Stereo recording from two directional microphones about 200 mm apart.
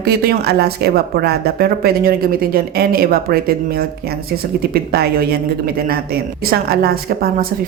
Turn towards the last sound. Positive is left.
turn(degrees=-50)  # may be behind; listen again after turning